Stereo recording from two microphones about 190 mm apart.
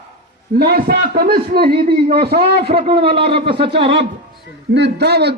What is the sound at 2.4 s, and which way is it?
A man's voice, 30° right (ahead or behind).